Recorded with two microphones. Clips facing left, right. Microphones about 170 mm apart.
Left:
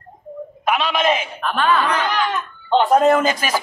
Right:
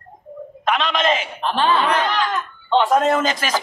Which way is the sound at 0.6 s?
10° left (ahead or behind).